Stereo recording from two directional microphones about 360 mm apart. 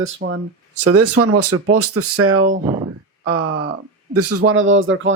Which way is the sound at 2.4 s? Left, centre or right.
Centre.